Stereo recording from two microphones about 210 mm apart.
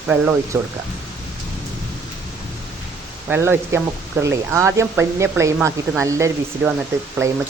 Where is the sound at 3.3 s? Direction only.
10° right (ahead or behind).